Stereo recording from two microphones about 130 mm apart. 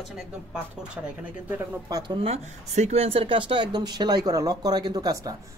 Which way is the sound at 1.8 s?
35° right (ahead or behind).